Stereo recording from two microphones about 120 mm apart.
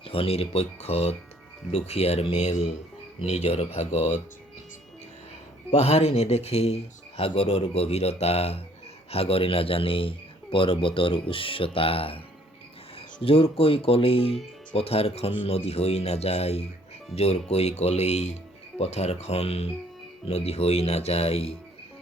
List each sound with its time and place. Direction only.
0.0 s speech: 50° left (ahead or behind)
5.7 s a man's voice: 60° left (ahead or behind)
13.2 s speech: 50° left (ahead or behind)